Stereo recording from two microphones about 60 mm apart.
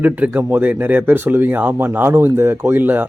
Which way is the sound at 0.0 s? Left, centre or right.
Right.